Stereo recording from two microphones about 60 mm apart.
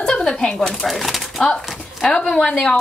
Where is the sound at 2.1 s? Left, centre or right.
Centre.